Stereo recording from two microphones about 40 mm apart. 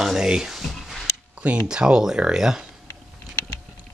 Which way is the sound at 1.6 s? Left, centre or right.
Centre.